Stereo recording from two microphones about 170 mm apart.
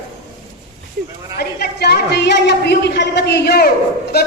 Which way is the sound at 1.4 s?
70° left (ahead or behind).